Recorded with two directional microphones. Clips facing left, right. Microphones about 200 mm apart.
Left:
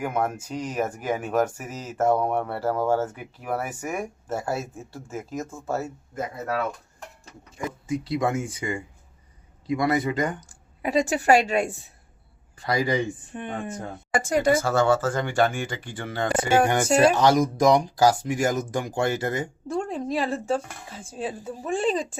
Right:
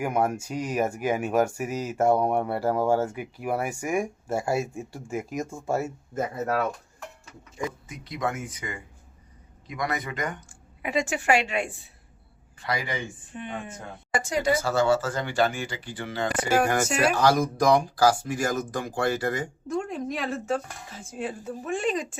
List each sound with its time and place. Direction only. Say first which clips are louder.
0.0 s speech: right 1 dB; 10° right (ahead or behind)
7.9 s speech: left 11 dB; 30° left (ahead or behind); by 16.3 s 50° left (ahead or behind)
16.5 s speech: left 3 dB; 25° left (ahead or behind)
21.7 s speech: left 3 dB; 30° left (ahead or behind)